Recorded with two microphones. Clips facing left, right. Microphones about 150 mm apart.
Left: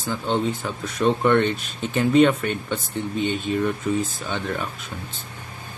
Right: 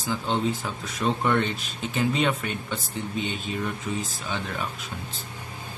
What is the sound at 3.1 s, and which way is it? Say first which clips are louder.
Speech: left 7 dB; 45° left (ahead or behind).